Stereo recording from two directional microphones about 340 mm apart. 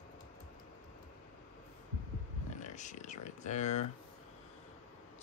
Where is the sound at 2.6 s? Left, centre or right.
Left.